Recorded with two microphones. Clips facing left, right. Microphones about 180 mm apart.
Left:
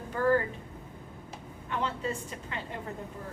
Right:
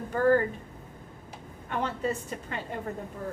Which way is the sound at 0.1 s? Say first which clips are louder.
Right 3 dB; 45° right (ahead or behind).